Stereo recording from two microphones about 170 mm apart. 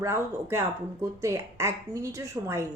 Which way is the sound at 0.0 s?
15° right (ahead or behind).